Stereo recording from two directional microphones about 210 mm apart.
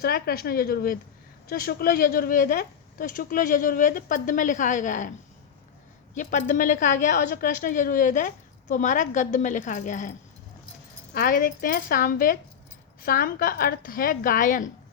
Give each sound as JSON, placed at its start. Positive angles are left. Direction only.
{"t": 0.0, "sound": "a woman's voice", "side_deg": 45}
{"t": 6.1, "sound": "speech", "side_deg": 40}
{"t": 11.1, "sound": "a woman's voice", "side_deg": 40}